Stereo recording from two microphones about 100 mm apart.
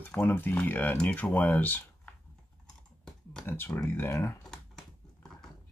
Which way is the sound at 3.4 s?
20° left (ahead or behind).